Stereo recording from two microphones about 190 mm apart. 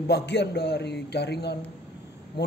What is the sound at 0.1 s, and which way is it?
A man's voice, 60° left (ahead or behind).